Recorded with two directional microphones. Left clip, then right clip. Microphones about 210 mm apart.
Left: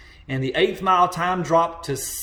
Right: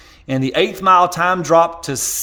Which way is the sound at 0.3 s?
55° right (ahead or behind).